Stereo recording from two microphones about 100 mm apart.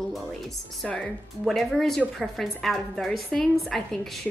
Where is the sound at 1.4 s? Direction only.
Centre (ahead or behind).